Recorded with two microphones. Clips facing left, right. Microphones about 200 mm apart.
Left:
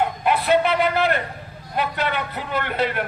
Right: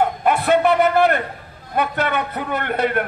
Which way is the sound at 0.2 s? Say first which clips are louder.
Right 1 dB; 50° right (ahead or behind).